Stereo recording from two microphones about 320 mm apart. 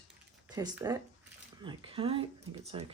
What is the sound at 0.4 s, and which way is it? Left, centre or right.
Speech, centre.